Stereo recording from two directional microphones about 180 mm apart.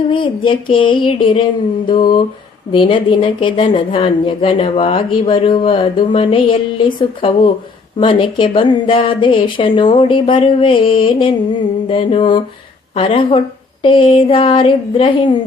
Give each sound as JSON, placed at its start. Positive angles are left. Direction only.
{"t": 0.1, "sound": "a woman's voice", "side_deg": 30}